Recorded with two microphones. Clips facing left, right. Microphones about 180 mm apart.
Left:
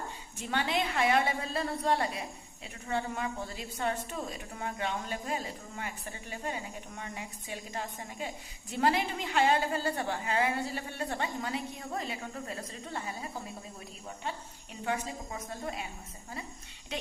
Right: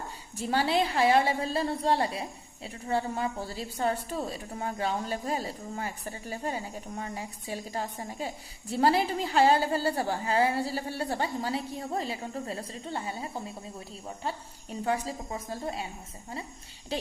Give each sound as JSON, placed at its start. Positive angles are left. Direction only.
{"t": 0.3, "sound": "a woman's voice", "side_deg": -35}
{"t": 16.9, "sound": "a woman's voice", "side_deg": -30}